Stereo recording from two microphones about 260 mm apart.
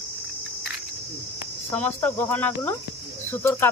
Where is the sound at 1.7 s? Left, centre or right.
Centre.